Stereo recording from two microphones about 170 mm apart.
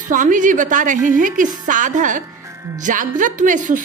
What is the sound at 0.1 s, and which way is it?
Speech, 50° right (ahead or behind).